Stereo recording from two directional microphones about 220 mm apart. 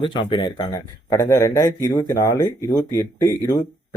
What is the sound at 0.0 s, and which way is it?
Speech, 20° left (ahead or behind).